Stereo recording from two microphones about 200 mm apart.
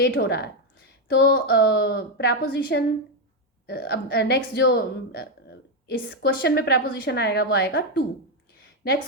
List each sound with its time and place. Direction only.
0.1 s speech: 55° left (ahead or behind)